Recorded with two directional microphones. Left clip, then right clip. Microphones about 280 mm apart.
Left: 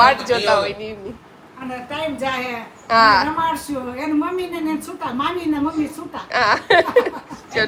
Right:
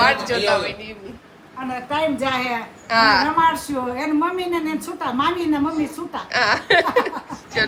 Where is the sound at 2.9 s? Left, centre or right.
Centre.